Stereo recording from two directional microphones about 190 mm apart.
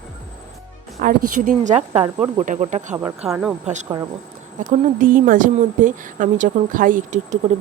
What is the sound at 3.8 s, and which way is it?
Speech, 20° right (ahead or behind).